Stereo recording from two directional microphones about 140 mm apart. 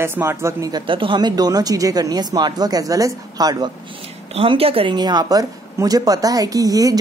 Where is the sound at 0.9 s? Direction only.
35° right (ahead or behind).